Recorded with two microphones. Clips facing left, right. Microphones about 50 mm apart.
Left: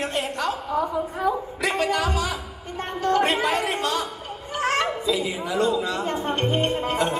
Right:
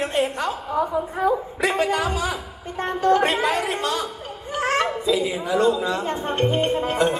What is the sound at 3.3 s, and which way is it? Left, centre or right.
Chatter, left.